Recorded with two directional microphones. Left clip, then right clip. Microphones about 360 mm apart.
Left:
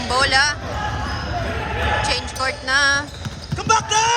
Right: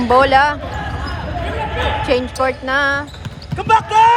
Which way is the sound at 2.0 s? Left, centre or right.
Centre.